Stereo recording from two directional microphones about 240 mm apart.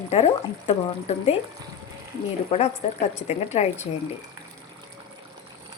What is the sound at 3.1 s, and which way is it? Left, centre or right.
Speech, left.